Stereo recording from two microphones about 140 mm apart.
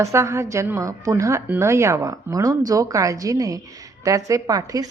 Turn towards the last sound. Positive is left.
turn(degrees=-25)  # may be behind; listen again after turning